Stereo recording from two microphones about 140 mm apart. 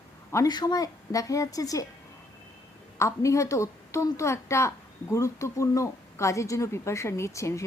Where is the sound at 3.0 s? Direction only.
20° left (ahead or behind).